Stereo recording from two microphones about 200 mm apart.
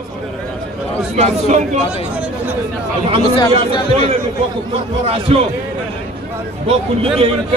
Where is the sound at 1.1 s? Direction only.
35° right (ahead or behind).